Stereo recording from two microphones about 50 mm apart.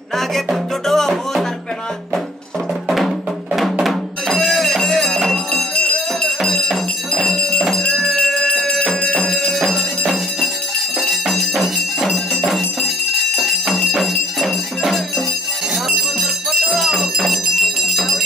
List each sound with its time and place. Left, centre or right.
0.8 s music: centre
3.8 s music: centre
9.2 s music: centre
15.9 s bell: centre